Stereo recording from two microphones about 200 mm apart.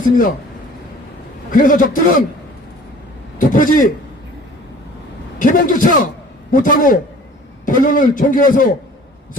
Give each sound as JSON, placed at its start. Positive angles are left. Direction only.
{"t": 0.0, "sound": "a man's voice", "side_deg": 40}
{"t": 1.5, "sound": "a man's voice", "side_deg": 40}
{"t": 3.3, "sound": "a man's voice", "side_deg": 40}
{"t": 5.4, "sound": "a man's voice", "side_deg": 40}